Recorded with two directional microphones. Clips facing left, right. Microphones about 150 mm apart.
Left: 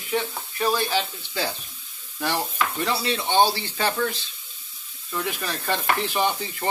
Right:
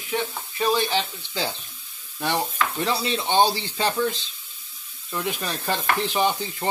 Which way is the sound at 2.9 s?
20° right (ahead or behind).